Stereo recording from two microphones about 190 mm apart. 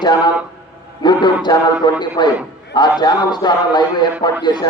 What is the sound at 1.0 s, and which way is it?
A man's voice, 20° left (ahead or behind).